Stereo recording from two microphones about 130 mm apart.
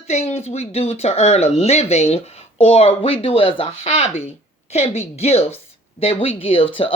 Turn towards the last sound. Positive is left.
turn(degrees=45)  # may be behind; listen again after turning